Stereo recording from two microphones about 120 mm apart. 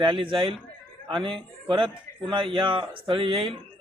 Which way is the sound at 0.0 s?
45° right (ahead or behind).